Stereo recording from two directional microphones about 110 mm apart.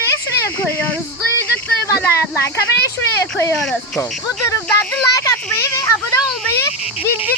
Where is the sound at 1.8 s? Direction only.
25° left (ahead or behind).